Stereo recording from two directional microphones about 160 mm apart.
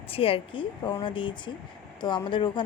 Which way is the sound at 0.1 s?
35° left (ahead or behind).